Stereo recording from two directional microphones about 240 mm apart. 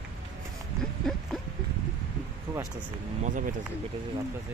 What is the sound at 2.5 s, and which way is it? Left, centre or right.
Speech, centre.